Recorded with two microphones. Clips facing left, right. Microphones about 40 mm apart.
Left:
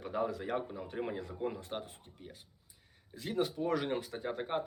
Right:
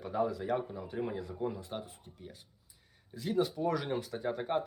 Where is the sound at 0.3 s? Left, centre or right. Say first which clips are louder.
Right 3 dB; left.